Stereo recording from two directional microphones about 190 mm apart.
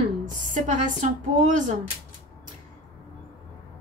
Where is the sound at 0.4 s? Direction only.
40° right (ahead or behind).